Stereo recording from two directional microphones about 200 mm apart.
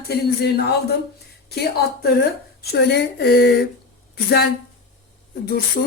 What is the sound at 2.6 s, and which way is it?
Speech, 55° left (ahead or behind).